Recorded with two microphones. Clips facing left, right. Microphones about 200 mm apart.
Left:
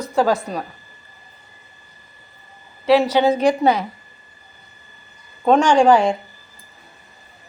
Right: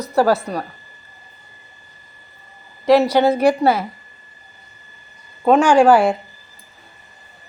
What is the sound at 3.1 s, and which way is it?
Speech, 10° right (ahead or behind).